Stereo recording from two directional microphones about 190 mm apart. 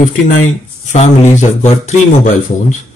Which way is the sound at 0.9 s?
35° left (ahead or behind).